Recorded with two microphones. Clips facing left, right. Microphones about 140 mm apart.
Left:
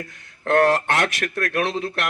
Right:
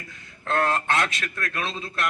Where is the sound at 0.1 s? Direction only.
70° left (ahead or behind).